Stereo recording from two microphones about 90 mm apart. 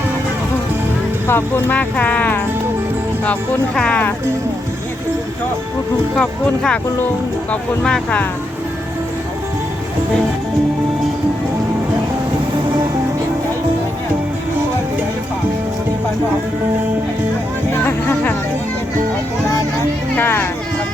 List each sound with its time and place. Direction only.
1.3 s speech: 25° left (ahead or behind)
3.8 s speech: 15° left (ahead or behind)
6.1 s speech: 5° left (ahead or behind)
17.8 s music: 20° left (ahead or behind)
20.1 s speech: 25° left (ahead or behind)